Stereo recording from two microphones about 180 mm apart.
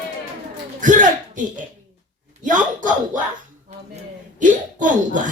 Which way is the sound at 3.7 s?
40° right (ahead or behind).